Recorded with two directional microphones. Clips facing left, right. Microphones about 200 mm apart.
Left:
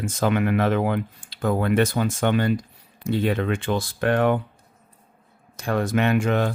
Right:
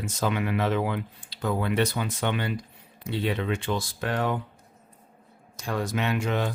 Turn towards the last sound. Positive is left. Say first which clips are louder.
# left 6 dB
turn(degrees=50)  # may be behind; listen again after turning